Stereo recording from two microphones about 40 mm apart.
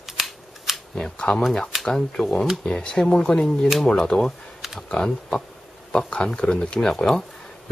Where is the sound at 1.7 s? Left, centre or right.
Centre.